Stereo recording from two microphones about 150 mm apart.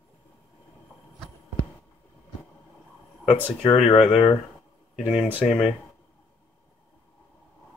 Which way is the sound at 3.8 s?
45° left (ahead or behind).